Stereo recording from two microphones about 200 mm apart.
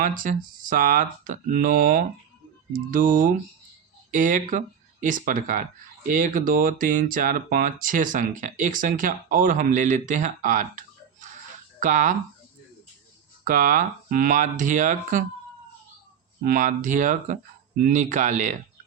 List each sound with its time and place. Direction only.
0.0 s speech: 40° right (ahead or behind)
13.4 s speech: 45° right (ahead or behind)
16.4 s speech: 45° right (ahead or behind)